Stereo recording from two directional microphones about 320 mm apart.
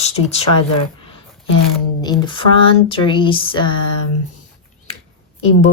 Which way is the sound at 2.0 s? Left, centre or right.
Centre.